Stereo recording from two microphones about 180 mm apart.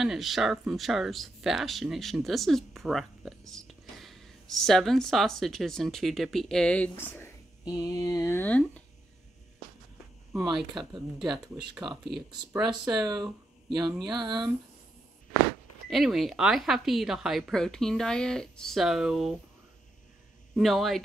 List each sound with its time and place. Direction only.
0.0 s speech: centre (ahead or behind)
11.1 s a woman's voice: centre (ahead or behind)
11.8 s speech: 25° right (ahead or behind)
15.9 s a woman's voice: centre (ahead or behind)
20.5 s a woman's voice: centre (ahead or behind)